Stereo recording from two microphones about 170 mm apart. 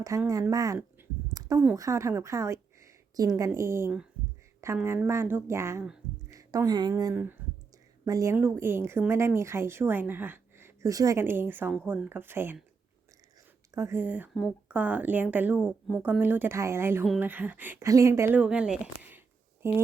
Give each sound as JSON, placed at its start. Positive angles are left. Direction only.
{"t": 0.3, "sound": "speech", "side_deg": -20}
{"t": 1.3, "sound": "a sound", "side_deg": -20}
{"t": 1.7, "sound": "a woman's voice", "side_deg": -20}
{"t": 13.7, "sound": "speech", "side_deg": -15}